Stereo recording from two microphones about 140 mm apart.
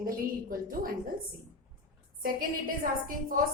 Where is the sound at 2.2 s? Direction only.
90° right.